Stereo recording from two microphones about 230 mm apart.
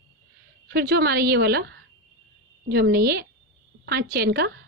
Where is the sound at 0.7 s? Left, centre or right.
Right.